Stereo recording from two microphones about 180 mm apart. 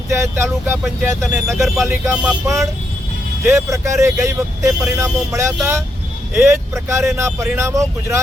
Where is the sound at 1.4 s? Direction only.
Centre (ahead or behind).